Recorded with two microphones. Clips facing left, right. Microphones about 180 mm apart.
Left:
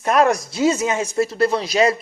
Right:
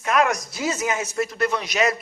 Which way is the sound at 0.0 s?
35° left (ahead or behind).